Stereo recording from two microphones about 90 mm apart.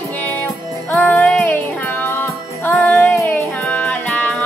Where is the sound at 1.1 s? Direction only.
10° left (ahead or behind).